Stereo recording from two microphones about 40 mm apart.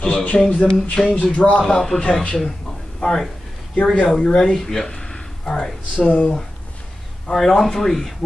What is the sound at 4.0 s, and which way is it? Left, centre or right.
Speech, left.